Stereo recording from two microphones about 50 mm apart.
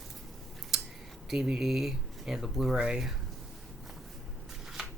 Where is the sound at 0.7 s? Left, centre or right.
Centre.